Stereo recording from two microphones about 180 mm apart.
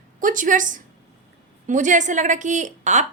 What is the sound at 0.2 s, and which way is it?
A woman's voice, 45° right (ahead or behind).